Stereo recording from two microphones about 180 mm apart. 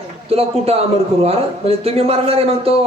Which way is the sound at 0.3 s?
35° right (ahead or behind).